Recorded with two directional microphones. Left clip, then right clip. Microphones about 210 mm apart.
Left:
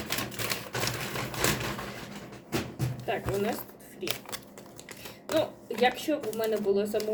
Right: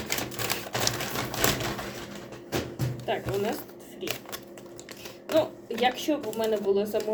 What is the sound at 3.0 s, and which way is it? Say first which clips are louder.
Speech: right 1 dB; centre (ahead or behind).